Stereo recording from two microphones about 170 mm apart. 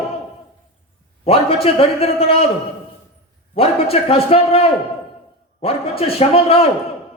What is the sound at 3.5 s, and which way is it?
A man's voice, 35° left (ahead or behind).